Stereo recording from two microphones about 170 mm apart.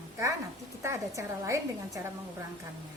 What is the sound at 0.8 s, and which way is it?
A woman's voice, 15° right (ahead or behind).